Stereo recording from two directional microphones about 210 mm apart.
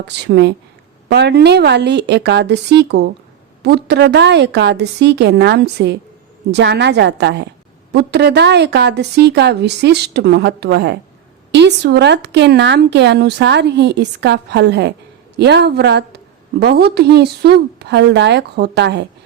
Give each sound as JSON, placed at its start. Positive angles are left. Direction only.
{"t": 0.1, "sound": "a woman's voice", "side_deg": -55}